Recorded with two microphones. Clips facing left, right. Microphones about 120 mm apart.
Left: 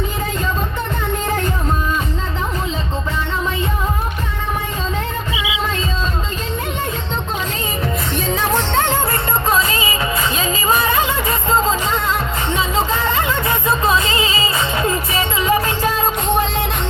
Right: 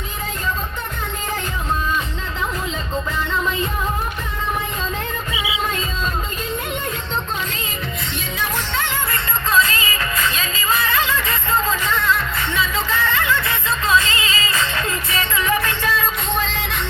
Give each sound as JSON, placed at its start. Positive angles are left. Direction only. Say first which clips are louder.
{"t": 8.4, "sound": "music", "louder": "left 7 dB", "side_deg": 50}
{"t": 9.5, "sound": "music", "louder": "right 1 dB", "side_deg": 30}